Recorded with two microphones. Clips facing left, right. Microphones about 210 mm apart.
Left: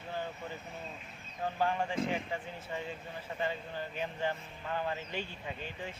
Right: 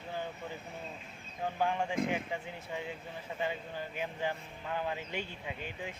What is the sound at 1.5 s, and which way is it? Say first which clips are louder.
Speech: even; 10° right (ahead or behind).